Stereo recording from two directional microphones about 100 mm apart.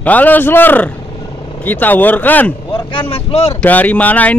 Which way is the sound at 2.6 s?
55° left (ahead or behind).